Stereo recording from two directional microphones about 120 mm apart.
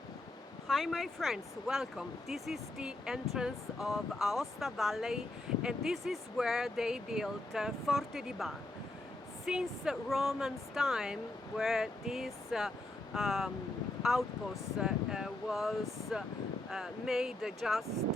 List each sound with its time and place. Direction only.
0.7 s speech: centre (ahead or behind)